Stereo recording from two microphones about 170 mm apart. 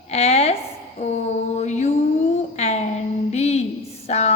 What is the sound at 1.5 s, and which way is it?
Mantra, 40° left (ahead or behind).